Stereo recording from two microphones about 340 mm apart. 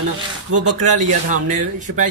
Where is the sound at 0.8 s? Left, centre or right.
Right.